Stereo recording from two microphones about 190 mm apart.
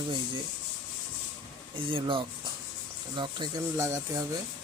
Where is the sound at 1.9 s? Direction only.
25° right (ahead or behind).